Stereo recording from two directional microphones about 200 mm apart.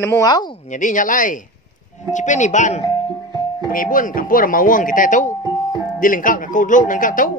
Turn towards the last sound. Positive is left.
turn(degrees=40)  # may be behind; listen again after turning